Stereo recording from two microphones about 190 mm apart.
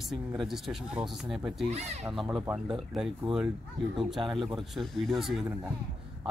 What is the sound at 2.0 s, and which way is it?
Speech, 5° right (ahead or behind).